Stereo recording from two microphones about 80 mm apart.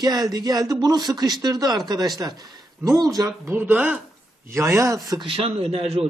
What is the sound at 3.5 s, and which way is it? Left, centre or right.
Speech, right.